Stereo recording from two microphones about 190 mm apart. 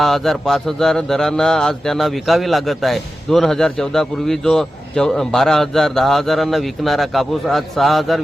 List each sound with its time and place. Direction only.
0.0 s mantra: centre (ahead or behind)